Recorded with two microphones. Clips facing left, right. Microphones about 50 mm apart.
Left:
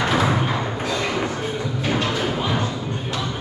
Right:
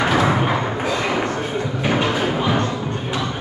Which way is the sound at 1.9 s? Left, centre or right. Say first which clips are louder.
Right 3 dB; centre.